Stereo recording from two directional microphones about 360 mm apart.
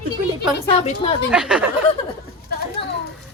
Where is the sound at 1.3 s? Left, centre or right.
Centre.